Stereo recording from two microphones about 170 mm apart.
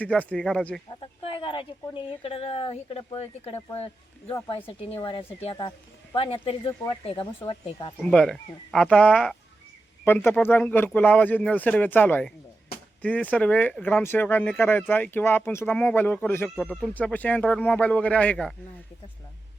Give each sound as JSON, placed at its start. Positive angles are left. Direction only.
{"t": 0.0, "sound": "speech", "side_deg": 10}
{"t": 1.2, "sound": "speech", "side_deg": 30}
{"t": 8.0, "sound": "speech", "side_deg": 5}